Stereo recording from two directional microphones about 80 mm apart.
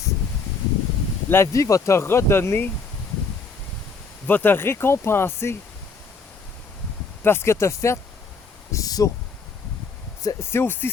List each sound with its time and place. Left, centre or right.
1.3 s speech: left
4.3 s speech: left
7.3 s speech: left
8.7 s speech: left
10.5 s speech: left